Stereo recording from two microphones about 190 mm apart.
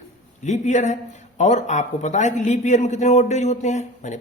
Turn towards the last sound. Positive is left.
turn(degrees=40)  # may be behind; listen again after turning